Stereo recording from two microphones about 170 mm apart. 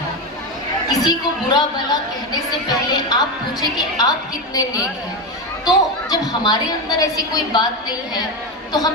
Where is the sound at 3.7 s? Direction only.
20° left (ahead or behind).